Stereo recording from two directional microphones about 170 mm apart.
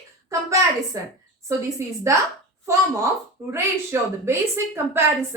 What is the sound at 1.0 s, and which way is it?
A woman's voice, 20° right (ahead or behind).